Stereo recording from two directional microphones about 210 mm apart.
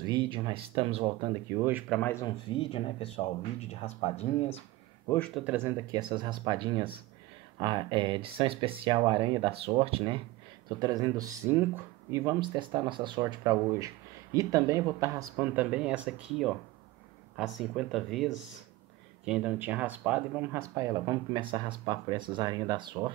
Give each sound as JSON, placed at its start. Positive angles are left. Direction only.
{"t": 0.0, "sound": "speech", "side_deg": -20}
{"t": 1.5, "sound": "speech", "side_deg": -10}
{"t": 1.9, "sound": "speech", "side_deg": 10}
{"t": 2.5, "sound": "speech", "side_deg": 25}
{"t": 5.0, "sound": "speech", "side_deg": 10}
{"t": 5.3, "sound": "speech", "side_deg": -5}